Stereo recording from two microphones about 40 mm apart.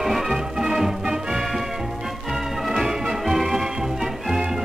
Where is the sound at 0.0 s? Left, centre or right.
Centre.